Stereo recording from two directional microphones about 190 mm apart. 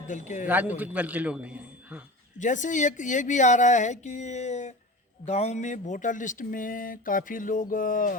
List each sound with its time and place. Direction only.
0.1 s speech: 40° left (ahead or behind)
0.4 s a man's voice: 10° right (ahead or behind)
2.4 s speech: 40° left (ahead or behind)